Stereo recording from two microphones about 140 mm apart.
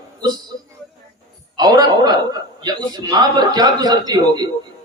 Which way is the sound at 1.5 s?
30° right (ahead or behind).